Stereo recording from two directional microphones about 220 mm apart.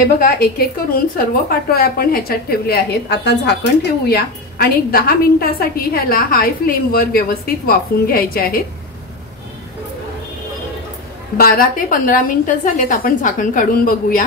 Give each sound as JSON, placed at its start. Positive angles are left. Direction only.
{"t": 0.2, "sound": "a woman's voice", "side_deg": 40}
{"t": 11.3, "sound": "a woman's voice", "side_deg": 40}